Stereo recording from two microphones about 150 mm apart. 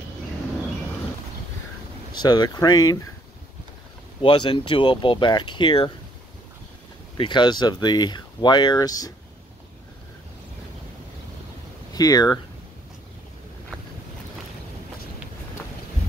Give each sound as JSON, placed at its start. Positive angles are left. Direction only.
{"t": 2.1, "sound": "speech", "side_deg": 30}
{"t": 4.2, "sound": "speech", "side_deg": 30}
{"t": 7.2, "sound": "speech", "side_deg": 30}
{"t": 11.9, "sound": "speech", "side_deg": 25}